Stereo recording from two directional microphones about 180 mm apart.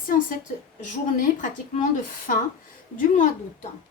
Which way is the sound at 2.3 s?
45° left (ahead or behind).